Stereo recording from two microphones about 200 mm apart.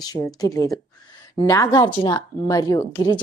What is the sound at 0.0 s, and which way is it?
A woman's voice, 20° left (ahead or behind).